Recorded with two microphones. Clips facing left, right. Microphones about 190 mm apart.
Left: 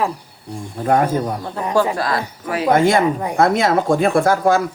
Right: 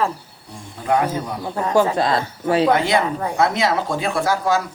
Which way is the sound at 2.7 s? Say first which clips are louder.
Left 4 dB; 50° left (ahead or behind).